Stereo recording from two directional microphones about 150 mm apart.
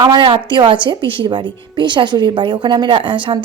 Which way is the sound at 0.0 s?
30° right (ahead or behind).